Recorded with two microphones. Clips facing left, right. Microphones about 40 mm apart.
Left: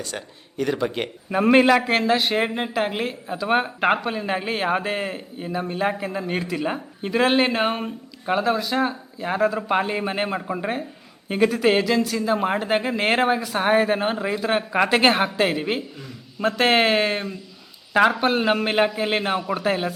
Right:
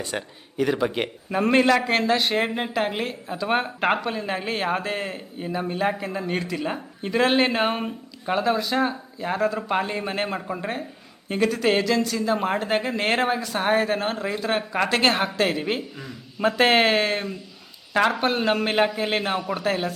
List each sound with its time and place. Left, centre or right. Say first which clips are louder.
0.0 s a man's voice: right 2 dB; centre
0.5 s a man's voice: right 1 dB; centre
1.3 s speech: left 3 dB; centre
16.0 s speech: right 1 dB; centre